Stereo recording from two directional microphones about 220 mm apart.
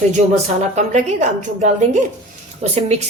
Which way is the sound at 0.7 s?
30° right (ahead or behind).